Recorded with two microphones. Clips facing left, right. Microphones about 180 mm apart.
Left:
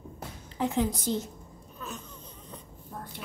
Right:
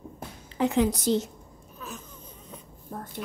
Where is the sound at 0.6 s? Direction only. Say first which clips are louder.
Right 4 dB; 85° right.